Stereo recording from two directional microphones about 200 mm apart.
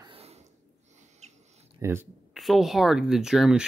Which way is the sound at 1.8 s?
15° right (ahead or behind).